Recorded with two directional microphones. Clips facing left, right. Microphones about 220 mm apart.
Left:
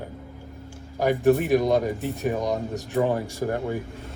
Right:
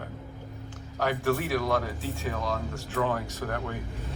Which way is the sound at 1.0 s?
15° left (ahead or behind).